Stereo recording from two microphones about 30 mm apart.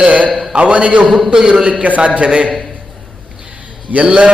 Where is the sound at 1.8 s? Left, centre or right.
Right.